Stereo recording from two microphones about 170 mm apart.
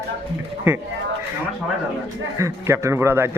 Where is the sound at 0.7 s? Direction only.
15° right (ahead or behind).